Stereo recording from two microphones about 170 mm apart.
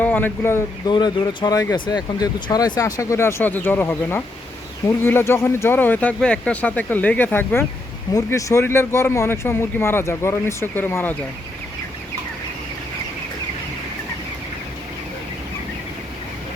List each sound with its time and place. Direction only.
0.0 s speech: 10° left (ahead or behind)
0.9 s speech: 25° left (ahead or behind)